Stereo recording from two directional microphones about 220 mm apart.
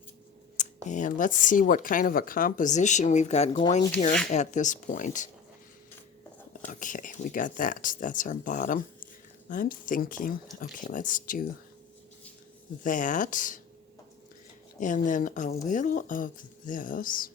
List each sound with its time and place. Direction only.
0.5 s speech: 35° left (ahead or behind)
6.7 s speech: 35° left (ahead or behind)
12.8 s speech: 35° left (ahead or behind)
14.8 s speech: 35° left (ahead or behind)